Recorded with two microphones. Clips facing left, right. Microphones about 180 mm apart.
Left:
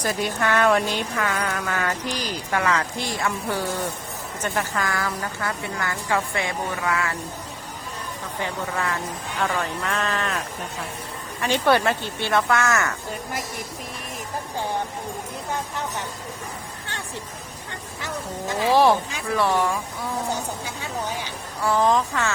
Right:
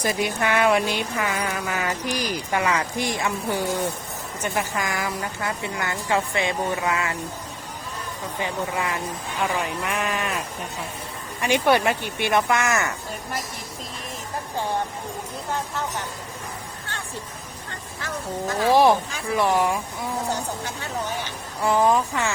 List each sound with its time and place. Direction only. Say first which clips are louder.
0.0 s a woman's voice: right 1 dB; 10° right (ahead or behind)
8.4 s speech: right 1 dB; 15° right (ahead or behind)
18.0 s speech: right 2 dB; 20° left (ahead or behind)
18.7 s speech: even; 15° right (ahead or behind)
21.6 s speech: right 1 dB; 15° right (ahead or behind)